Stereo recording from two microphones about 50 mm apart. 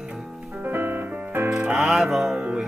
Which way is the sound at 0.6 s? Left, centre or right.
Right.